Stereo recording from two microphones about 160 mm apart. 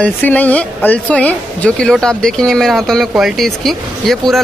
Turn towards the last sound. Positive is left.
turn(degrees=0)  # may be behind; listen again after turning